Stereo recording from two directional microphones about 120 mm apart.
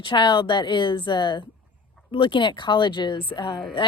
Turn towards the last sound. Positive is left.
turn(degrees=40)  # may be behind; listen again after turning